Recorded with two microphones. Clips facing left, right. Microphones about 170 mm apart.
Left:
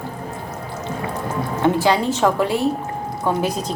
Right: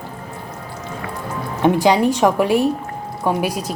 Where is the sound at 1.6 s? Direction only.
15° right (ahead or behind).